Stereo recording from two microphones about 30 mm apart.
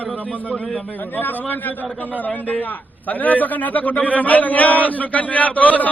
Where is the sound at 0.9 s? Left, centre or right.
Left.